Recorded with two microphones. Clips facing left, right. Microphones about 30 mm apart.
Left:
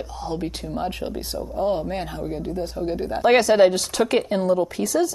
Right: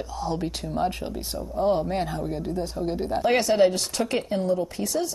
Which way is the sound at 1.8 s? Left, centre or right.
Centre.